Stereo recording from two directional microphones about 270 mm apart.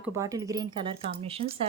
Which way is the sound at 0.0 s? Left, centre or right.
Centre.